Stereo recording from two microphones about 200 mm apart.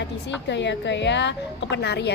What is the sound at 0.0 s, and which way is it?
A woman's voice, 60° left (ahead or behind).